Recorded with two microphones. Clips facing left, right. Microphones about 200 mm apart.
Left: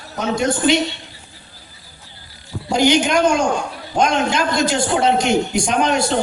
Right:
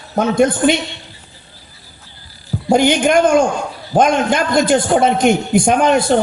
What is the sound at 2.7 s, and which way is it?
A man's voice, 55° right (ahead or behind).